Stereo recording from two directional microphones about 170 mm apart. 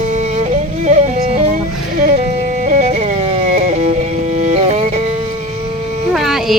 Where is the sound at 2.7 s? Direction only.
45° right (ahead or behind).